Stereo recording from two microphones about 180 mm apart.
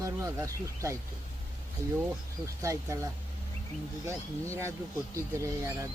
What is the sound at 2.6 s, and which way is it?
Speech, 15° right (ahead or behind).